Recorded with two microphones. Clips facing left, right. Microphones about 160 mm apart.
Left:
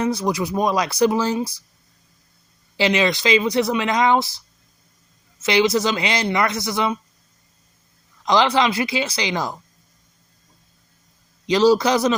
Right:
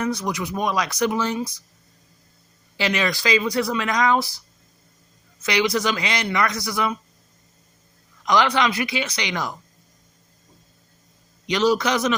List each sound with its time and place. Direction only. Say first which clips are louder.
0.0 s speech: left 4 dB; 30° left (ahead or behind)
2.7 s speech: left 4 dB; 25° left (ahead or behind)
8.2 s speech: left 2 dB; 25° left (ahead or behind)
11.4 s speech: left 4 dB; 30° left (ahead or behind)